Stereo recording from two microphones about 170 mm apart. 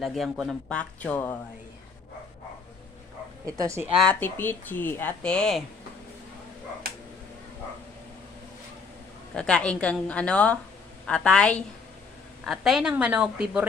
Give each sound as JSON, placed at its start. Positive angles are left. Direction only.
{"t": 0.0, "sound": "speech", "side_deg": 0}
{"t": 3.4, "sound": "a woman's voice", "side_deg": -20}
{"t": 3.9, "sound": "speech", "side_deg": 5}
{"t": 9.3, "sound": "speech", "side_deg": 5}